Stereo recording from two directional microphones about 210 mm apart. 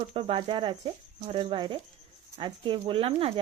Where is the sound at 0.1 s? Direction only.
25° right (ahead or behind).